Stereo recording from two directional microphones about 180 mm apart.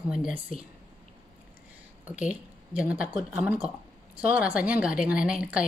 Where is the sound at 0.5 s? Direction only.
45° left (ahead or behind).